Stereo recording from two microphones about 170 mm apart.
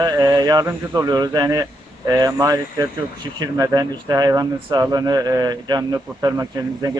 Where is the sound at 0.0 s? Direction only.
20° right (ahead or behind).